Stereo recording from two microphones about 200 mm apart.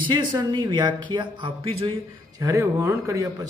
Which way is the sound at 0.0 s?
25° right (ahead or behind).